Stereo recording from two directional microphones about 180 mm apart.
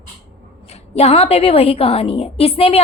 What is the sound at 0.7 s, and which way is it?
A woman's voice, 35° left (ahead or behind).